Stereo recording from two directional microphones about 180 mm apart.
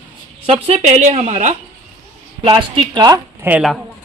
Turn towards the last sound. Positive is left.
turn(degrees=-5)  # may be behind; listen again after turning